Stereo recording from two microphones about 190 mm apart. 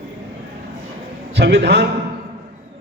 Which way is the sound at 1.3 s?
65° right (ahead or behind).